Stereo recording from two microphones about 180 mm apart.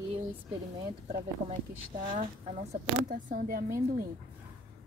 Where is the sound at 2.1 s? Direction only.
40° right (ahead or behind).